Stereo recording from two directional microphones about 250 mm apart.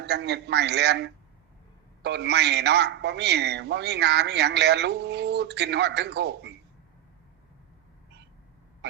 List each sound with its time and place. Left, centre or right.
0.0 s a man's voice: right